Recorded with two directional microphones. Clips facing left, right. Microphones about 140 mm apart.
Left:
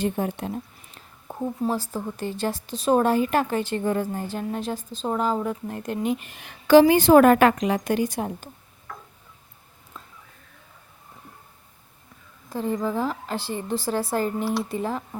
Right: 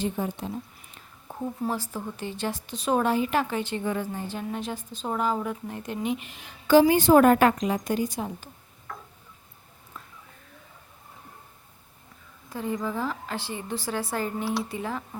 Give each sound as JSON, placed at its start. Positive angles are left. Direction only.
{"t": 0.0, "sound": "speech", "side_deg": 65}
{"t": 1.3, "sound": "speech", "side_deg": 25}
{"t": 6.7, "sound": "a woman's voice", "side_deg": 80}
{"t": 8.9, "sound": "tick-tock", "side_deg": 0}
{"t": 12.5, "sound": "speech", "side_deg": 35}
{"t": 14.4, "sound": "speech", "side_deg": 0}
{"t": 14.7, "sound": "speech", "side_deg": 35}